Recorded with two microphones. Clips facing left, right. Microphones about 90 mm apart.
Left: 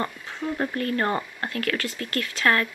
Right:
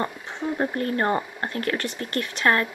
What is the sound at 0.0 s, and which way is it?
Speech, 20° right (ahead or behind).